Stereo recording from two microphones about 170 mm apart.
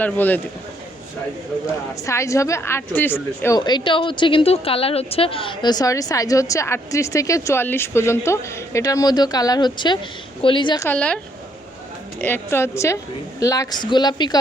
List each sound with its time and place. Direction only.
0.0 s a woman's voice: 10° left (ahead or behind)
2.0 s a woman's voice: 20° left (ahead or behind)
3.6 s a woman's voice: 25° left (ahead or behind)
10.8 s a woman's voice: 5° left (ahead or behind)
12.2 s a woman's voice: 10° left (ahead or behind)